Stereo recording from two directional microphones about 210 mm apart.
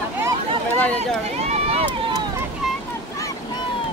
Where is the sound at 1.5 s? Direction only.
30° right (ahead or behind).